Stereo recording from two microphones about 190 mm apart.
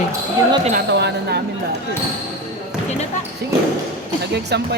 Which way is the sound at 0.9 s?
65° right (ahead or behind).